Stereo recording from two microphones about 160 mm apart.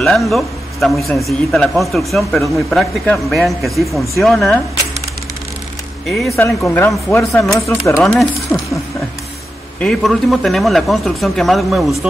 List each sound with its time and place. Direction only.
0.0 s a man's voice: centre (ahead or behind)
6.3 s speech: 15° left (ahead or behind)
8.0 s speech: centre (ahead or behind)
9.8 s a man's voice: centre (ahead or behind)